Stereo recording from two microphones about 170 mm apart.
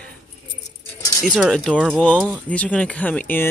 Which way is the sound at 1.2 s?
Centre (ahead or behind).